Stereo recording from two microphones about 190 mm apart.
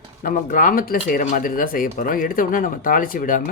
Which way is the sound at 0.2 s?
45° left (ahead or behind).